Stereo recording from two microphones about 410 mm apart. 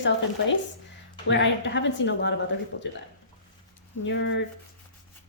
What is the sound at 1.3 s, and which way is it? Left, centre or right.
A woman's voice, left.